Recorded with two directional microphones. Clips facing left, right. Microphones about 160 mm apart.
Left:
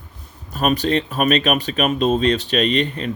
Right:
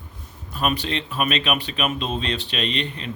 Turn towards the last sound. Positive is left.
turn(degrees=45)  # may be behind; listen again after turning